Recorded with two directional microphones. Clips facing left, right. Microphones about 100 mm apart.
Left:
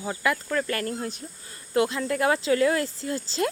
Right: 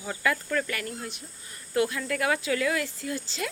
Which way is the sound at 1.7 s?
25° left (ahead or behind).